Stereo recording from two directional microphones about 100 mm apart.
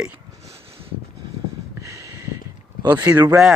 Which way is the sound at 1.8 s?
30° right (ahead or behind).